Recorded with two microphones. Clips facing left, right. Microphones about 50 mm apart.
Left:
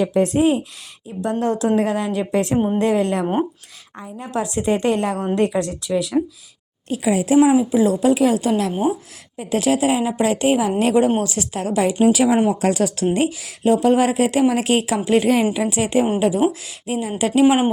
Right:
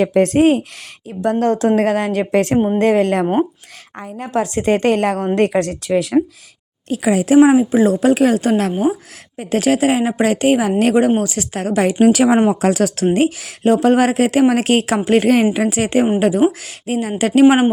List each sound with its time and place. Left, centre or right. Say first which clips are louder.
0.0 s a woman's voice: right 4 dB; right
5.9 s a woman's voice: right 4 dB; right
6.8 s speech: right 3 dB; right
7.3 s speech: right 4 dB; right
7.7 s a woman's voice: right 3 dB; right
12.0 s speech: right 4 dB; right
15.5 s speech: right 3 dB; right